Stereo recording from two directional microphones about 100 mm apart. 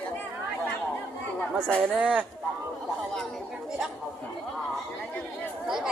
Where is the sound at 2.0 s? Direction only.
10° right (ahead or behind).